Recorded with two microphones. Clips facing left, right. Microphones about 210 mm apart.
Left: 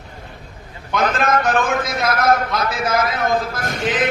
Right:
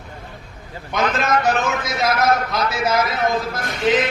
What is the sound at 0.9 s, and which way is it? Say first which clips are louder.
A man's voice: left 1 dB; 55° left (ahead or behind).